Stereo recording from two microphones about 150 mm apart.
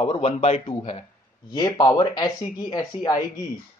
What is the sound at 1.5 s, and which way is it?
Speech, 25° left (ahead or behind).